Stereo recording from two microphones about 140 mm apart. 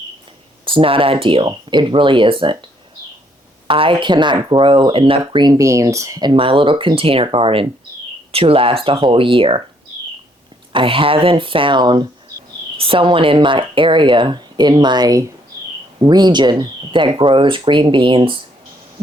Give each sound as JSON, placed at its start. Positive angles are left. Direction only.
{"t": 0.6, "sound": "speech", "side_deg": -40}
{"t": 3.7, "sound": "speech", "side_deg": -40}
{"t": 6.3, "sound": "speech", "side_deg": -40}
{"t": 10.7, "sound": "speech", "side_deg": -40}